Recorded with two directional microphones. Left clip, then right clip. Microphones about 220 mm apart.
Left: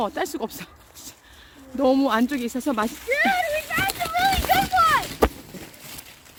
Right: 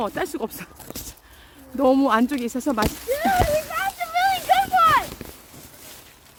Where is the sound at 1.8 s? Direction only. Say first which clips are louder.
Right 2 dB; 10° right (ahead or behind).